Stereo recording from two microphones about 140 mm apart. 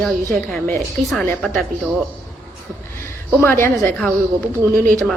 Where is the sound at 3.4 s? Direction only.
15° left (ahead or behind).